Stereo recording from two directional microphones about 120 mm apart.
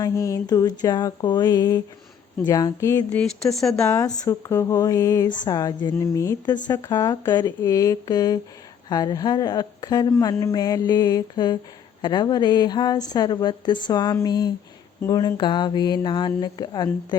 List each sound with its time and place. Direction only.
0.0 s a woman's voice: 25° left (ahead or behind)
3.1 s speech: 5° left (ahead or behind)
3.8 s a woman's voice: 30° left (ahead or behind)